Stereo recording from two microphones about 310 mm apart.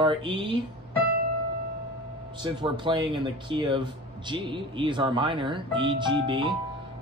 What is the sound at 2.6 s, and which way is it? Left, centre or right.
Speech, centre.